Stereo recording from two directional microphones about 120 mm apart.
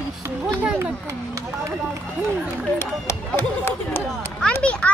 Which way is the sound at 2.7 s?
20° left (ahead or behind).